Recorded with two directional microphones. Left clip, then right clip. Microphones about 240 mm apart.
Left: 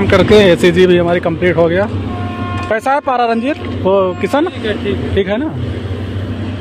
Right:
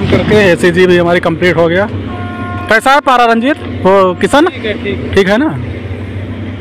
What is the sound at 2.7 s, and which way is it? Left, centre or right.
Speech, centre.